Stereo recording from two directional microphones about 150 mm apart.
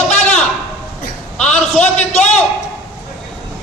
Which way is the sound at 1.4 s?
5° left (ahead or behind).